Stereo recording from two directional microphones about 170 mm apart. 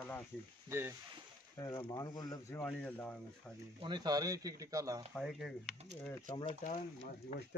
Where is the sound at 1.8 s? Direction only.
25° left (ahead or behind).